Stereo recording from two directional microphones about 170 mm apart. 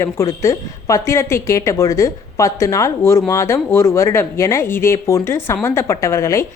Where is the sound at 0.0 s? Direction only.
15° left (ahead or behind).